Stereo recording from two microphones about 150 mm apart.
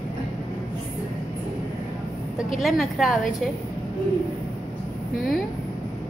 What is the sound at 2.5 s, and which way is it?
Speech, centre (ahead or behind).